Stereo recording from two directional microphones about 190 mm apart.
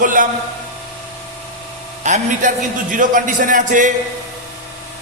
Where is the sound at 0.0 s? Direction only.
45° right (ahead or behind).